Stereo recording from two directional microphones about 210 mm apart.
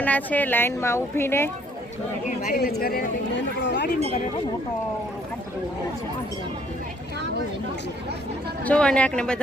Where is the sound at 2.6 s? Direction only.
50° left (ahead or behind).